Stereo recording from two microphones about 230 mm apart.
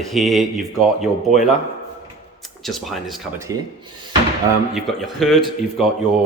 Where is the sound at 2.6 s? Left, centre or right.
Centre.